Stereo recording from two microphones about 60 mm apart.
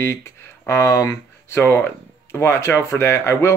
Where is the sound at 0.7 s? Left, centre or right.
Left.